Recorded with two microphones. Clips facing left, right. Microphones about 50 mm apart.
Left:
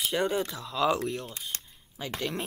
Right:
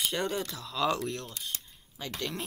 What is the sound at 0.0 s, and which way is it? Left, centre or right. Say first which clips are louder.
Speech: left 4 dB; centre.